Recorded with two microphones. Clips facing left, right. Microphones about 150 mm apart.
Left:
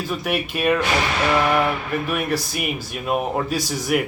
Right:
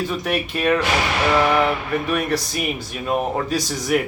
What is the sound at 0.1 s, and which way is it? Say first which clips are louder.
Speech: right 1 dB; 5° left (ahead or behind).